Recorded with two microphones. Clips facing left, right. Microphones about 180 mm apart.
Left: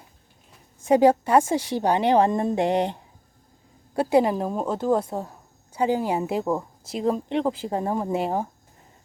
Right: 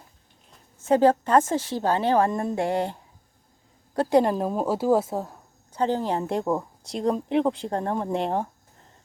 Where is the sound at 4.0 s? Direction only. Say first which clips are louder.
Even; 10° left (ahead or behind).